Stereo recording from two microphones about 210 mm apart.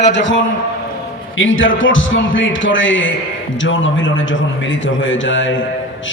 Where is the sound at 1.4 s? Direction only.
65° left (ahead or behind).